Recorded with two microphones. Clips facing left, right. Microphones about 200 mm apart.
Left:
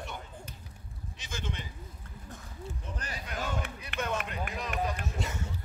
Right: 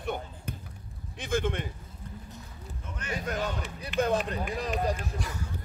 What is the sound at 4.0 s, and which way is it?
Speech, 35° right (ahead or behind).